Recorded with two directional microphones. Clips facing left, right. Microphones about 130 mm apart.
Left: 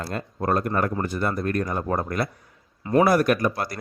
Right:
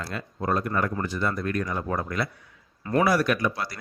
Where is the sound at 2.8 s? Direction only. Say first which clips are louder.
Left 4 dB; 25° left (ahead or behind).